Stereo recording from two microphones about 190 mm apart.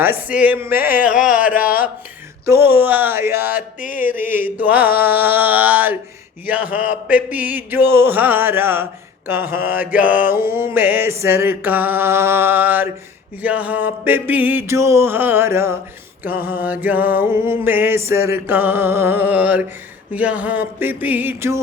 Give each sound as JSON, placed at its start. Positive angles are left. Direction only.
{"t": 0.0, "sound": "mantra", "side_deg": -10}
{"t": 1.5, "sound": "speech", "side_deg": 45}
{"t": 2.5, "sound": "mantra", "side_deg": -10}